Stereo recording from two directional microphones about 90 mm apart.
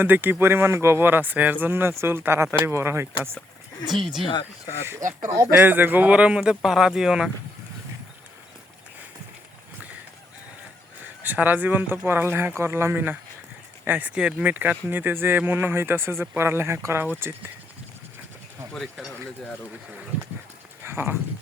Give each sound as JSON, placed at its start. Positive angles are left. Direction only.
{"t": 0.0, "sound": "speech", "side_deg": -20}
{"t": 4.3, "sound": "speech", "side_deg": 55}
{"t": 4.9, "sound": "speech", "side_deg": -30}
{"t": 11.2, "sound": "speech", "side_deg": -20}
{"t": 18.7, "sound": "speech", "side_deg": 0}
{"t": 20.8, "sound": "speech", "side_deg": -25}